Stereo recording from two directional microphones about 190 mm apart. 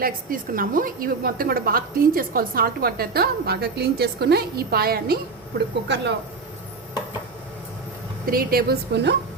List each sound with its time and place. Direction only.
0.0 s a woman's voice: 50° right (ahead or behind)
5.9 s speech: 65° right (ahead or behind)
8.3 s a woman's voice: 50° right (ahead or behind)